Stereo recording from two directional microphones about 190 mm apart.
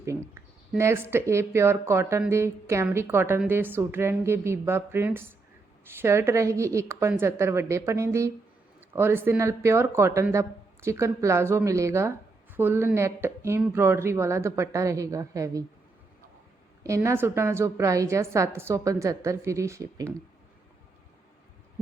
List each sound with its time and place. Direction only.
0.0 s speech: 15° right (ahead or behind)
16.8 s speech: 15° right (ahead or behind)